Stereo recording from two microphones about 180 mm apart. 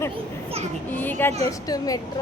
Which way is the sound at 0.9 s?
10° left (ahead or behind).